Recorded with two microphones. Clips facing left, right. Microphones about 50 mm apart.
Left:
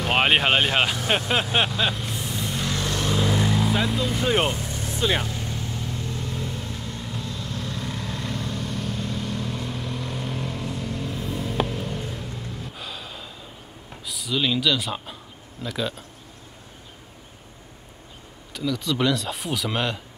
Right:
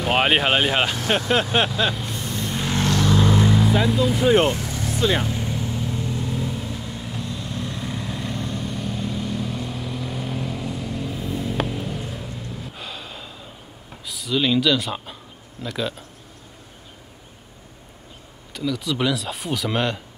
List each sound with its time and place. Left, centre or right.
0.0 s speech: centre
1.0 s vehicle: centre
3.6 s speech: centre
4.5 s vehicle: right
5.3 s vehicle: centre
14.0 s speech: centre
18.5 s speech: centre